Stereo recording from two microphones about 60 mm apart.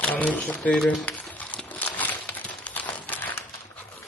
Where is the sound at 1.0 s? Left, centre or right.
Left.